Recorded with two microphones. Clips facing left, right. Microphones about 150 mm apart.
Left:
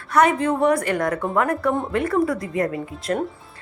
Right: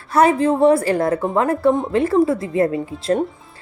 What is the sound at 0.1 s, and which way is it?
Speech, 30° right (ahead or behind).